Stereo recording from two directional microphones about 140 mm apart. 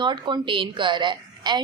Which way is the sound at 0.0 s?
35° right (ahead or behind).